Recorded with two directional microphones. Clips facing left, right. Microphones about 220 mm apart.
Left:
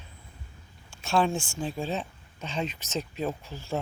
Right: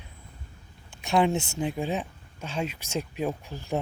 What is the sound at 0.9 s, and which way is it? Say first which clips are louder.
Speech: right 2 dB; 15° right (ahead or behind).